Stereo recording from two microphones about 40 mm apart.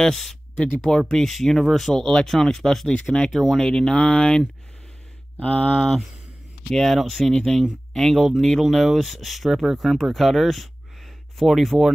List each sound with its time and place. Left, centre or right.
0.0 s speech: centre
2.9 s speech: left
3.3 s speech: centre
3.6 s speech: left
6.7 s speech: centre
8.6 s speech: centre